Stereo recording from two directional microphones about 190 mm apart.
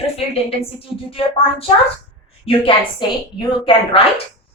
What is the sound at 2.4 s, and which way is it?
A woman's voice, 30° left (ahead or behind).